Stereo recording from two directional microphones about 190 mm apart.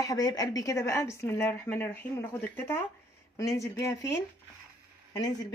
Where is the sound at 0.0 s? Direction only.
20° left (ahead or behind).